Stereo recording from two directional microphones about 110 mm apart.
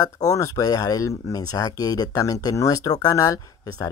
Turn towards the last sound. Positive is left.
turn(degrees=35)  # may be behind; listen again after turning